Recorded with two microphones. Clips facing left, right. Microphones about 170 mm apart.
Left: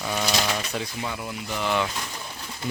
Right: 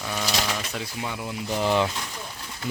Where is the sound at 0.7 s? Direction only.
Centre (ahead or behind).